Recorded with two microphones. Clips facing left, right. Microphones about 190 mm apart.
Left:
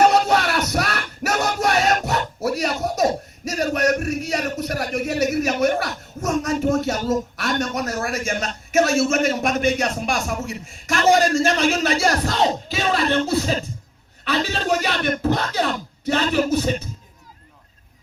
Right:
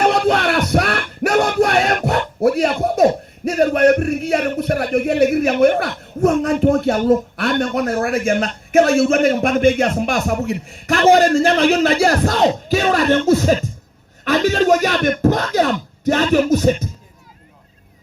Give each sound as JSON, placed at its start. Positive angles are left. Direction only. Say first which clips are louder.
{"t": 0.0, "sound": "music", "louder": "right 1 dB", "side_deg": -55}
{"t": 6.2, "sound": "speech", "louder": "right 6 dB", "side_deg": -55}
{"t": 10.4, "sound": "a man's voice", "louder": "right 8 dB", "side_deg": -60}
{"t": 11.6, "sound": "speech", "louder": "right 5 dB", "side_deg": -45}